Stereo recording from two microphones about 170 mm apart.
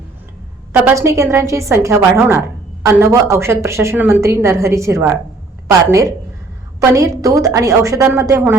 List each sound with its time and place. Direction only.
0.8 s a woman's voice: 15° right (ahead or behind)